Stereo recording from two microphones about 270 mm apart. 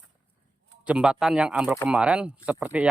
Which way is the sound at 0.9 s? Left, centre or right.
Centre.